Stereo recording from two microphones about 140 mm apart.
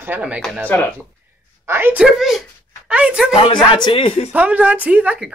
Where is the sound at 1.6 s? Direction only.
15° right (ahead or behind).